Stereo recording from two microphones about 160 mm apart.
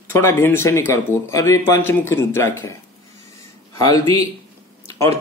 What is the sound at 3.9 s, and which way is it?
Speech, 25° left (ahead or behind).